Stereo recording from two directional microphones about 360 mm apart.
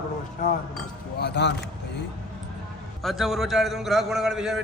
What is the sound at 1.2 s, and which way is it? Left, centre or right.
Speech, left.